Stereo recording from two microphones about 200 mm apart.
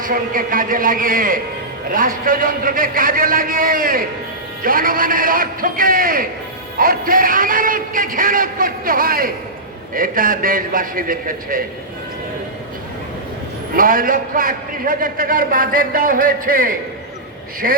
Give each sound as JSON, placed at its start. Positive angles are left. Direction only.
{"t": 0.0, "sound": "a man's voice", "side_deg": -45}
{"t": 13.7, "sound": "a man's voice", "side_deg": -45}